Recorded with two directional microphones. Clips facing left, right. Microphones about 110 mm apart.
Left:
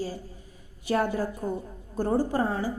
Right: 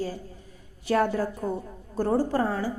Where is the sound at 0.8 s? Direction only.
15° left (ahead or behind).